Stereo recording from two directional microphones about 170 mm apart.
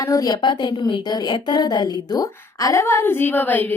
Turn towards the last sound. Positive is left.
turn(degrees=10)  # may be behind; listen again after turning